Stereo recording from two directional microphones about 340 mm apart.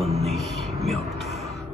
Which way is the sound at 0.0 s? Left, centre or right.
Centre.